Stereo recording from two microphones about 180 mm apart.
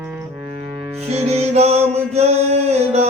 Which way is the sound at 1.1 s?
35° right (ahead or behind).